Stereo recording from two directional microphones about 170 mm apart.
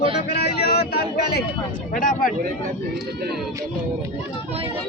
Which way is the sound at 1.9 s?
55° left (ahead or behind).